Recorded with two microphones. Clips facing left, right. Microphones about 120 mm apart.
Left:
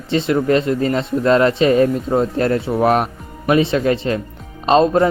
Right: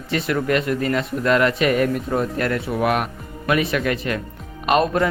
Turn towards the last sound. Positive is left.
turn(degrees=25)  # may be behind; listen again after turning